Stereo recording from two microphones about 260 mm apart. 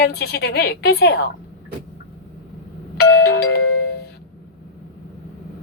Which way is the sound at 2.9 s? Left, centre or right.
Left.